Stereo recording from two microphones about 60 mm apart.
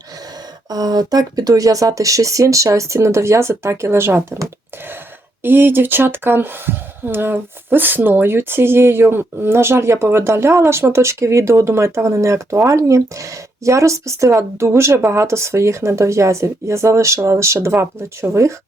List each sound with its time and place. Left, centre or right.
0.7 s speech: right
5.4 s speech: right